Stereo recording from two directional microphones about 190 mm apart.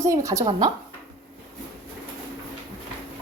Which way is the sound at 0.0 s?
15° right (ahead or behind).